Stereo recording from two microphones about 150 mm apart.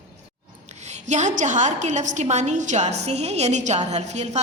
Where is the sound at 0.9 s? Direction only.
50° right (ahead or behind).